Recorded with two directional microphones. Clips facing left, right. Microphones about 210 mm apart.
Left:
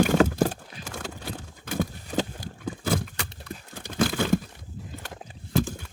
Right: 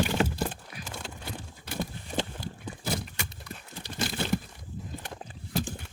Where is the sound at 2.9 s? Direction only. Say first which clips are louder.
Left 5 dB; 55° left (ahead or behind).